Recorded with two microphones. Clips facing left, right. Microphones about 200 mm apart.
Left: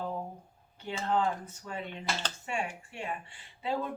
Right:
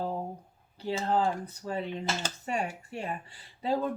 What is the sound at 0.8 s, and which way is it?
Speech, 35° right (ahead or behind).